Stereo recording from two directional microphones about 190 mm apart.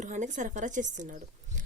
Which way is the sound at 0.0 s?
40° right (ahead or behind).